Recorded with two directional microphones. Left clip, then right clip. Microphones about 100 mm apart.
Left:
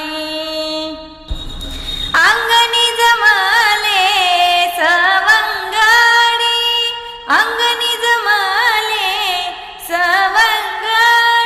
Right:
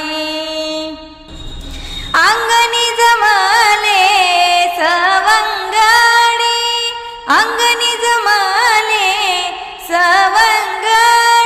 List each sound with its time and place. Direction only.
0.0 s music: 55° right (ahead or behind); by 0.9 s 30° right (ahead or behind)
2.1 s music: 55° right (ahead or behind)
3.8 s music: 45° right (ahead or behind)
9.9 s female singing: 50° right (ahead or behind)